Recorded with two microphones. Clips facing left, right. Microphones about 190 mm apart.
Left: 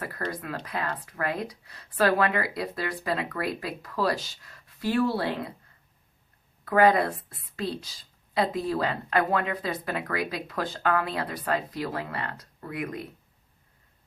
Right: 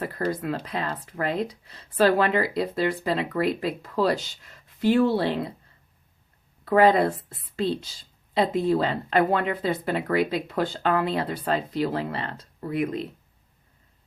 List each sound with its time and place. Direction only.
0.0 s a woman's voice: 25° right (ahead or behind)
6.7 s a woman's voice: 25° right (ahead or behind)